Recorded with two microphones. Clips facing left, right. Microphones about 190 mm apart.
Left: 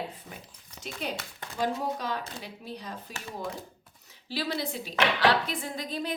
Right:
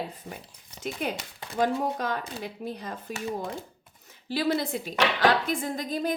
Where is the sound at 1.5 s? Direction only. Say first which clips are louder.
Right 4 dB; 50° right (ahead or behind).